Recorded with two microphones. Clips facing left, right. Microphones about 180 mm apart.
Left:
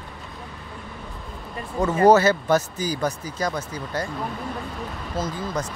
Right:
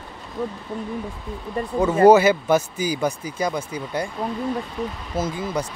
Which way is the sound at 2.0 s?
10° right (ahead or behind).